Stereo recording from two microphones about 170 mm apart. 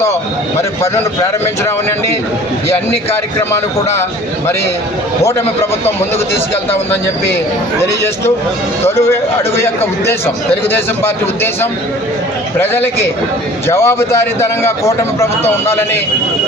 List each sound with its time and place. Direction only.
2.7 s a man's voice: 15° left (ahead or behind)
7.8 s a man's voice: 15° left (ahead or behind)
12.5 s a man's voice: 15° left (ahead or behind)